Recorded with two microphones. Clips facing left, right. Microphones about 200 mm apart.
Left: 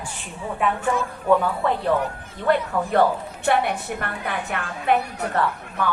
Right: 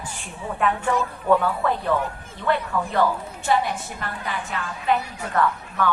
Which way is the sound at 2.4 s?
50° left (ahead or behind).